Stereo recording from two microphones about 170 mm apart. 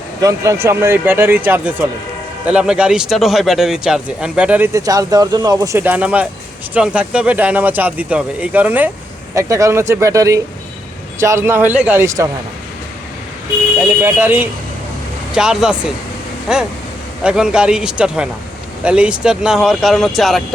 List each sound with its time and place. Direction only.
0.2 s a man's voice: 20° right (ahead or behind)
13.7 s a man's voice: 10° right (ahead or behind)